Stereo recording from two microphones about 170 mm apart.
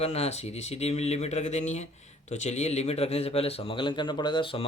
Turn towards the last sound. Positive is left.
turn(degrees=30)  # may be behind; listen again after turning